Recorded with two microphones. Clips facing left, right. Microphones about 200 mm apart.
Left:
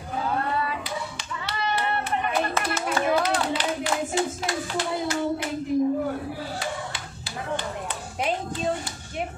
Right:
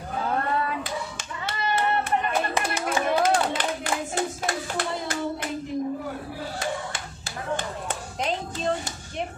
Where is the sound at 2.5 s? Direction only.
15° right (ahead or behind).